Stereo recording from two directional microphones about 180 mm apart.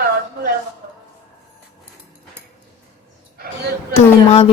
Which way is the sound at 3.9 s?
35° left (ahead or behind).